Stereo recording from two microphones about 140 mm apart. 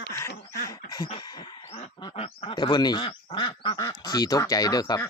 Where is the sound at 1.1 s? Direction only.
30° left (ahead or behind).